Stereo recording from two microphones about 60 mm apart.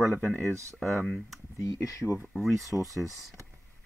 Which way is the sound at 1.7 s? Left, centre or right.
Left.